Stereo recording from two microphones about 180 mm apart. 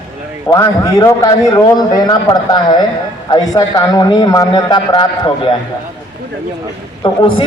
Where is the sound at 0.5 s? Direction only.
20° left (ahead or behind).